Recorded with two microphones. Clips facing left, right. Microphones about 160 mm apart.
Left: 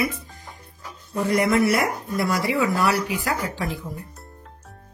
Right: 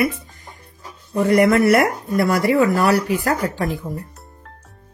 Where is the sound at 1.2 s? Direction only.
55° right (ahead or behind).